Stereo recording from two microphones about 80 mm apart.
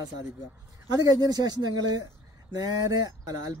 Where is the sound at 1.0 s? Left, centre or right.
Right.